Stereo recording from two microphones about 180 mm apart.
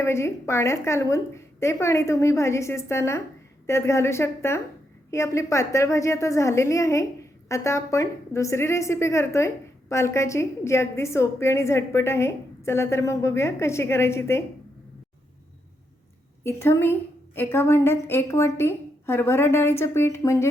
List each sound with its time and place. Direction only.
0.0 s a woman's voice: 15° left (ahead or behind)
16.4 s a woman's voice: 15° left (ahead or behind)